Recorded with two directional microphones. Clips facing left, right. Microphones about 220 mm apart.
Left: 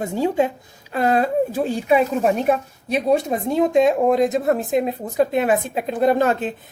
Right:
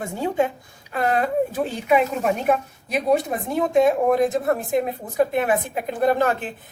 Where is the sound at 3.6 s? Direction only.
20° left (ahead or behind).